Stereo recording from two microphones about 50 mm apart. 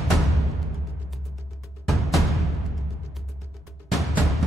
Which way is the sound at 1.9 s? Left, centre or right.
Centre.